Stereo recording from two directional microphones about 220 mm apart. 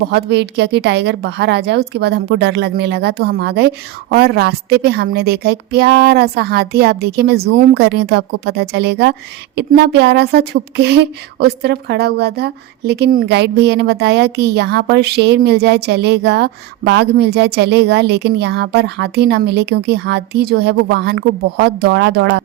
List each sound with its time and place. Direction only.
0.1 s speech: 50° right (ahead or behind)